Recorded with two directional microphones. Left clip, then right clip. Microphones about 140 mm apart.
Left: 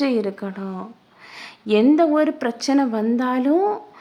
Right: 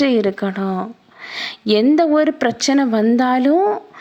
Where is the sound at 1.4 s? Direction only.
30° right (ahead or behind).